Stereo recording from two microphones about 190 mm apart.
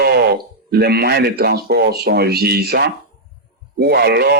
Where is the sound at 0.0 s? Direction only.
55° right (ahead or behind).